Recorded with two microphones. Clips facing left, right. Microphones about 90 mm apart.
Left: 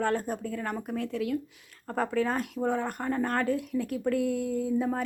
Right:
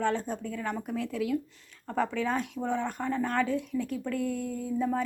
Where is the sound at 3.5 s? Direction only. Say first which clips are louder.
Left 2 dB; 55° left (ahead or behind).